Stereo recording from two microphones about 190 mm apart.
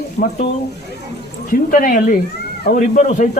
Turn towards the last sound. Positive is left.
turn(degrees=45)  # may be behind; listen again after turning